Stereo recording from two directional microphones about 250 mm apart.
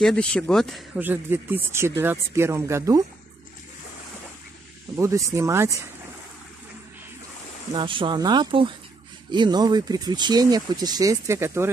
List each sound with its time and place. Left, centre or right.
0.0 s speech: centre
4.9 s speech: centre
7.7 s speech: centre